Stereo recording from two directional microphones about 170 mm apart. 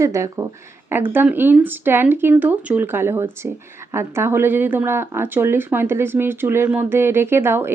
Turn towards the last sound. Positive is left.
turn(degrees=-15)  # may be behind; listen again after turning